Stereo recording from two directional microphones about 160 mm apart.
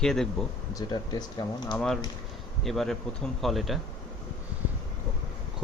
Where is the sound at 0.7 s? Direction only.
25° left (ahead or behind).